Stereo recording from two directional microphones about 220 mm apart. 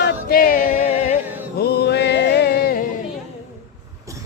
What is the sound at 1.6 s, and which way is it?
Music, 45° left (ahead or behind).